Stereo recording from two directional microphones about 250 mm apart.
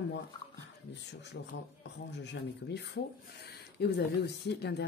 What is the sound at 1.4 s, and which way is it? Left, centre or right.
Speech, left.